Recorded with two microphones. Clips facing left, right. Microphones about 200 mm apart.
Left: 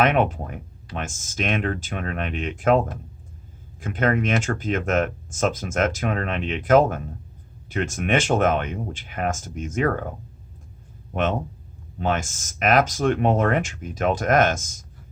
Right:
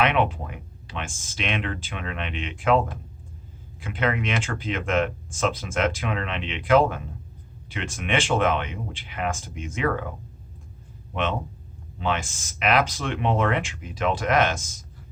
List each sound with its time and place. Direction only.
0.0 s speech: 45° left (ahead or behind)